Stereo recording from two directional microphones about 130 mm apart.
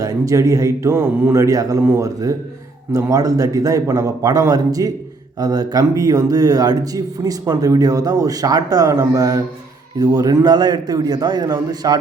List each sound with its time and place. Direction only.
0.0 s a man's voice: 25° right (ahead or behind)